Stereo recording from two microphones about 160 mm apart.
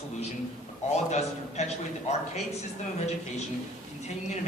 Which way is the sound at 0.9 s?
45° left (ahead or behind).